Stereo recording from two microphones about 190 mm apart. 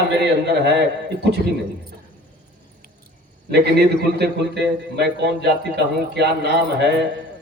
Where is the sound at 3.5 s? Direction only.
60° right (ahead or behind).